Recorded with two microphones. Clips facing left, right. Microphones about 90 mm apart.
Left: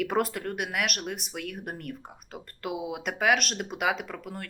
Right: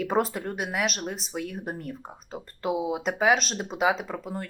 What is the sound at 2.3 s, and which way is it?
Speech, 30° right (ahead or behind).